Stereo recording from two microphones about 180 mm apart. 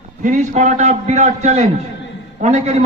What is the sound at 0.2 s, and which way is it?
A man's voice, 45° right (ahead or behind).